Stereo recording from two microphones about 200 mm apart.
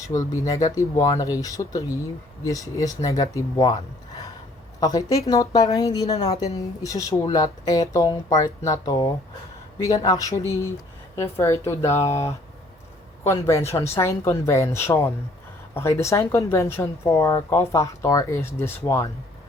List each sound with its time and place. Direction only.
0.3 s a woman's voice: 15° left (ahead or behind)
4.8 s a woman's voice: 15° left (ahead or behind)
13.2 s a woman's voice: 15° left (ahead or behind)